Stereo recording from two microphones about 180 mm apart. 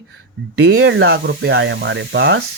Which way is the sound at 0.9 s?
80° right.